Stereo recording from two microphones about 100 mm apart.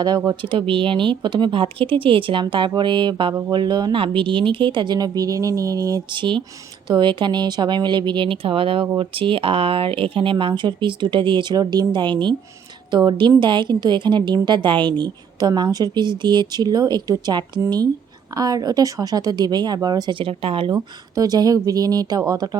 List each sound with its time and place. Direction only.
0.4 s a woman's voice: 60° right (ahead or behind)
4.0 s speech: 60° right (ahead or behind); by 6.0 s 35° right (ahead or behind)
6.1 s a woman's voice: 55° right (ahead or behind)
20.7 s a woman's voice: 40° right (ahead or behind)